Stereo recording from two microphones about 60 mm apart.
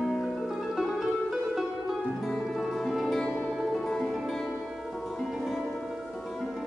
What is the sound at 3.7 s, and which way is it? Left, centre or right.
Music, centre.